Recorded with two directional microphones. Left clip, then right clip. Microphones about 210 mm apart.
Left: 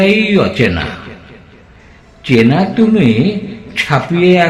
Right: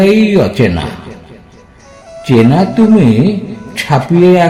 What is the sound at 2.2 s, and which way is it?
Speech, 40° right (ahead or behind).